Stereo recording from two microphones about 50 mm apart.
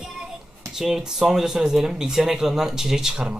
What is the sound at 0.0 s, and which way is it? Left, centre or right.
Hands, centre.